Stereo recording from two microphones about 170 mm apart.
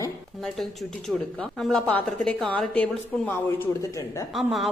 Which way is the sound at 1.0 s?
Centre (ahead or behind).